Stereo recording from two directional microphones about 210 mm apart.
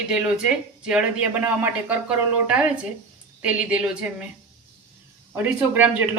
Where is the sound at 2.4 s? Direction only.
5° right (ahead or behind).